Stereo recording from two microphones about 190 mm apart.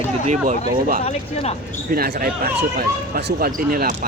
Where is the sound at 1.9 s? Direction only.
50° right (ahead or behind).